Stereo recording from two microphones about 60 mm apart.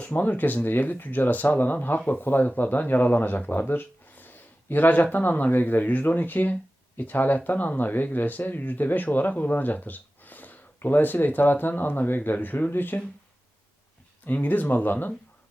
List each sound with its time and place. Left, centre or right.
0.0 s speech: left
14.3 s speech: left